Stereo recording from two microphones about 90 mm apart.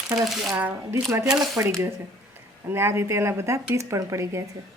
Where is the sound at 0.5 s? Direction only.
20° right (ahead or behind).